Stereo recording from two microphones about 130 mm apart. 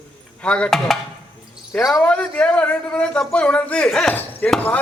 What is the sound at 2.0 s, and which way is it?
A man's voice, 10° left (ahead or behind).